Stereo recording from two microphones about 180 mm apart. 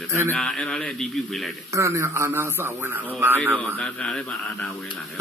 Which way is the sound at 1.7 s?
15° right (ahead or behind).